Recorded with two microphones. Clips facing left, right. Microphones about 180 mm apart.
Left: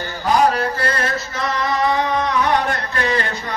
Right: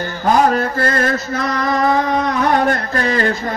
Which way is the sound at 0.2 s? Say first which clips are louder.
Right 2 dB; 45° right (ahead or behind).